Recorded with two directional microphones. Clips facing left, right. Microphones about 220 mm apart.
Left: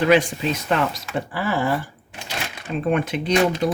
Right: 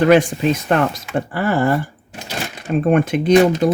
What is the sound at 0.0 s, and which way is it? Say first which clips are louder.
Speech: right 5 dB; 50° right (ahead or behind).